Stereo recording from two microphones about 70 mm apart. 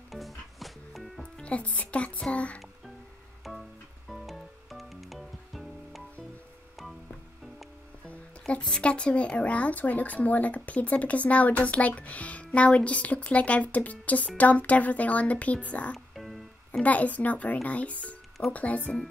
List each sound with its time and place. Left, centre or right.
0.1 s music: centre
1.2 s speech: centre
3.4 s music: centre
8.1 s speech: centre
16.2 s music: centre
16.8 s speech: left